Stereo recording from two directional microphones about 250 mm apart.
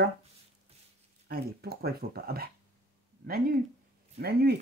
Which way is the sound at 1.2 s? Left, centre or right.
Right.